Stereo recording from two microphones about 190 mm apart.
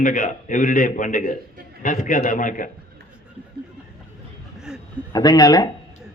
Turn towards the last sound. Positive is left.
turn(degrees=20)  # may be behind; listen again after turning